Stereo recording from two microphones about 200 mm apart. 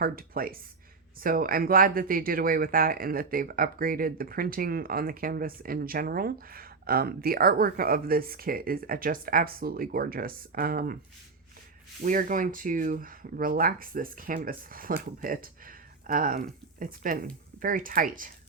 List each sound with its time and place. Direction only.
0.0 s speech: 45° right (ahead or behind)
12.0 s speech: 40° right (ahead or behind)